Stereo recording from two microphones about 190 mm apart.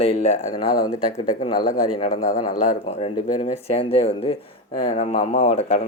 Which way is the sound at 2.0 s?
45° left (ahead or behind).